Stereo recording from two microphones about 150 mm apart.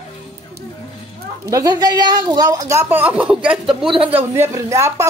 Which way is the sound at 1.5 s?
25° right (ahead or behind).